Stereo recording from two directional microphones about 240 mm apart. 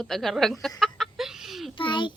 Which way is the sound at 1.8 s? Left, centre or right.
Centre.